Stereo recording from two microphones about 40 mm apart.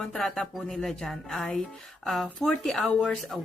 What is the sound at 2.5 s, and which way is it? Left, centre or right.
Speech, left.